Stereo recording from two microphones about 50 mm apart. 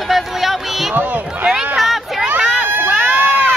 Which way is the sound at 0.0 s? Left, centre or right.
Centre.